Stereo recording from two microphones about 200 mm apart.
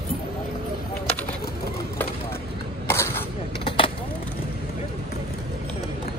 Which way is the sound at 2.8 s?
15° left (ahead or behind).